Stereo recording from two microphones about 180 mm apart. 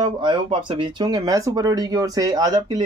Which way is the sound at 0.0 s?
25° right (ahead or behind).